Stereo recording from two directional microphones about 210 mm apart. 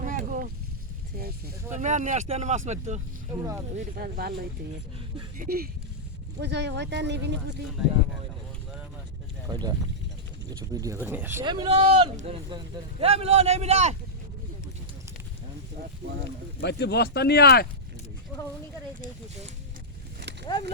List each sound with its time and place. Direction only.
0.0 s boat: 35° right (ahead or behind)
1.7 s speech: 35° right (ahead or behind)
3.8 s speech: 45° right (ahead or behind)
5.4 s speech: 45° right (ahead or behind)
9.5 s speech: 20° right (ahead or behind)
11.4 s speech: 20° right (ahead or behind)
16.6 s speech: 50° left (ahead or behind)